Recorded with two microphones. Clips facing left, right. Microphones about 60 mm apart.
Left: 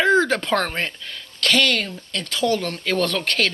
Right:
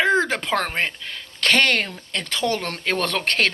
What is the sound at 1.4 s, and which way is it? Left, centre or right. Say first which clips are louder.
Speech: right 1 dB; right.